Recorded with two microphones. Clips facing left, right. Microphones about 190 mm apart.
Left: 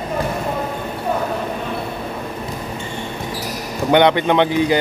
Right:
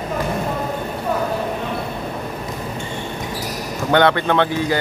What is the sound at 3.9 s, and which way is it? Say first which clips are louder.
Speech: left 2 dB; 15° left (ahead or behind).